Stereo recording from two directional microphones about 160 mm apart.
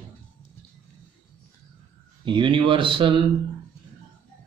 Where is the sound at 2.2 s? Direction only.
30° right (ahead or behind).